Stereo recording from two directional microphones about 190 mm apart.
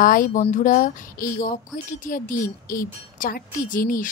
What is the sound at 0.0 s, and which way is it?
Speech, 45° left (ahead or behind).